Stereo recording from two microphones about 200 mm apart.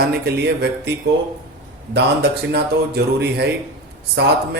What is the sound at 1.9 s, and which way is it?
Speech, 55° right (ahead or behind).